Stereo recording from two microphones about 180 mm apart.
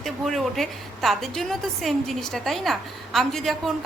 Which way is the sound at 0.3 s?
Centre (ahead or behind).